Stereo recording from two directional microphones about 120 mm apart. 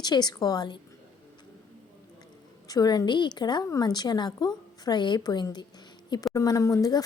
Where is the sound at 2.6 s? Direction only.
35° left (ahead or behind).